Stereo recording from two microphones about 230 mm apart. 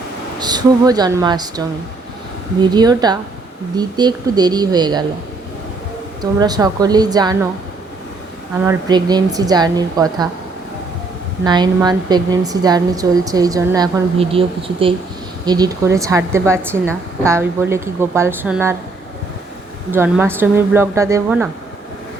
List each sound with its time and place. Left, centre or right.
0.3 s a woman's voice: centre
6.4 s a woman's voice: centre
8.6 s a woman's voice: centre
11.4 s a woman's voice: centre
19.9 s a woman's voice: centre